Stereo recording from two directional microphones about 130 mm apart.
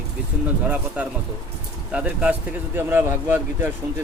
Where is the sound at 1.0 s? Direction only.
10° right (ahead or behind).